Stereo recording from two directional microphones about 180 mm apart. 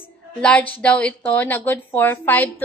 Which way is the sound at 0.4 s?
5° left (ahead or behind).